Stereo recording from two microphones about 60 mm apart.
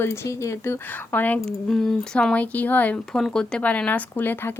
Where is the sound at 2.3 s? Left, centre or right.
Left.